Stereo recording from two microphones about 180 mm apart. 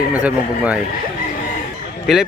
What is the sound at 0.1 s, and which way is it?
Speech, 10° right (ahead or behind).